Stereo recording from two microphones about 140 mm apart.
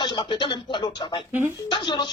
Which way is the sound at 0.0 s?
35° left (ahead or behind).